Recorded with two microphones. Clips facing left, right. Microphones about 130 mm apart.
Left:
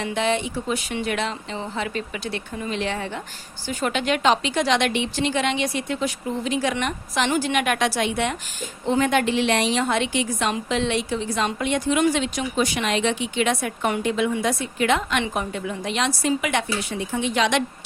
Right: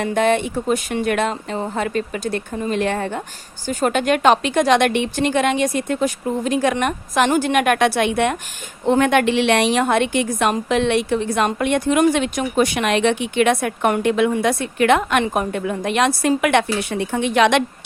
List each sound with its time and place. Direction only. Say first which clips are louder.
0.0 s a woman's voice: right 6 dB; 50° right (ahead or behind)